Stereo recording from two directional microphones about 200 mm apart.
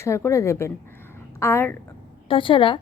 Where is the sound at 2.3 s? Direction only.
25° left (ahead or behind).